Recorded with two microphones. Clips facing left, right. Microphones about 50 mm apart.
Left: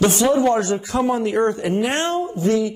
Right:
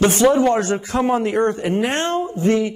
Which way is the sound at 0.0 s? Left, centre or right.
Right.